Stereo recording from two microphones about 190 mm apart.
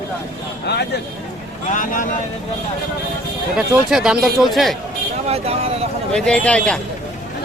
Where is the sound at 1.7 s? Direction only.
45° left (ahead or behind).